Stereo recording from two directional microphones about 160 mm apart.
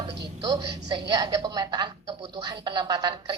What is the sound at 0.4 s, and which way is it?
A woman's voice, 25° right (ahead or behind).